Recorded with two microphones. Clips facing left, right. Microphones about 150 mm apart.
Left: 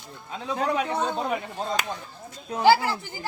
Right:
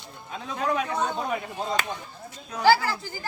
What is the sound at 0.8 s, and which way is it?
Speech, 25° left (ahead or behind).